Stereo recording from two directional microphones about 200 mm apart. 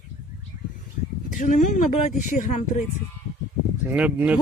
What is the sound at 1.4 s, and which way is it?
Speech, 40° left (ahead or behind).